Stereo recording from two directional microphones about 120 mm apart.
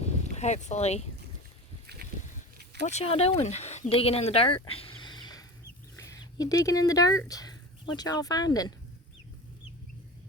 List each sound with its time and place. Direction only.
0.0 s speech: 70° left (ahead or behind)
3.0 s speech: 55° left (ahead or behind); by 8.7 s 35° left (ahead or behind)